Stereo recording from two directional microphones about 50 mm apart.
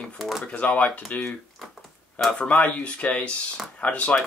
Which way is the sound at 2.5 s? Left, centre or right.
Left.